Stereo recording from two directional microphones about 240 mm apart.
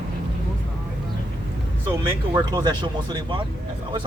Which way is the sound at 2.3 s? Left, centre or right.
Centre.